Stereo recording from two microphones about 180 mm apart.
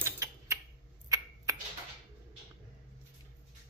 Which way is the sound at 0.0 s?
15° right (ahead or behind).